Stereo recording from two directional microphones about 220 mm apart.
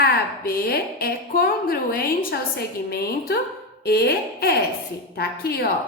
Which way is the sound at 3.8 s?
45° left (ahead or behind).